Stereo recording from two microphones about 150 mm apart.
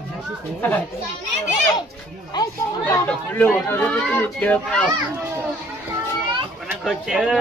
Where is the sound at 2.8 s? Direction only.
10° left (ahead or behind).